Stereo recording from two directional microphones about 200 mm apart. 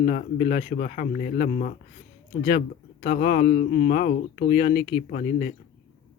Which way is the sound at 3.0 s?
35° left (ahead or behind).